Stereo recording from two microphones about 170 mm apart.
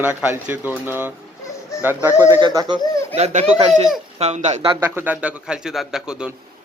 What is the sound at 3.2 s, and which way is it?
Speech, 40° right (ahead or behind).